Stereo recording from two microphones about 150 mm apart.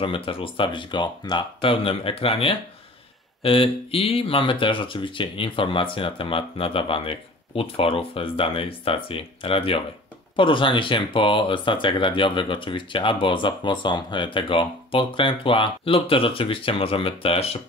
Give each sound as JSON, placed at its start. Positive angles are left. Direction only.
{"t": 0.0, "sound": "speech", "side_deg": 35}